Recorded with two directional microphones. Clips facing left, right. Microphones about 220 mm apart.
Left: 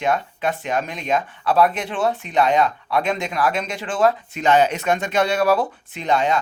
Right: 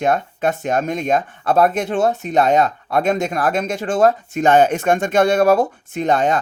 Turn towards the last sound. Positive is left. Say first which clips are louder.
# right 3 dB
turn(degrees=-50)  # may be behind; listen again after turning